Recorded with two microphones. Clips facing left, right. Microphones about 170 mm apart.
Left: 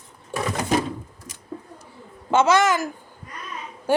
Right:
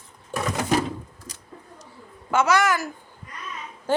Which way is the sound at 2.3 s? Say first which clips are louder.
Left 3 dB; 25° left (ahead or behind).